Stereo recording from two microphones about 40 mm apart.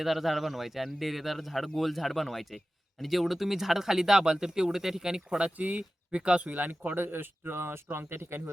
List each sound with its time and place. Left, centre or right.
0.0 s speech: centre
5.4 s speech: right
7.0 s speech: right